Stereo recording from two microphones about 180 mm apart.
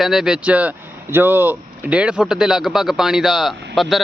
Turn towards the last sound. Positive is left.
turn(degrees=0)  # may be behind; listen again after turning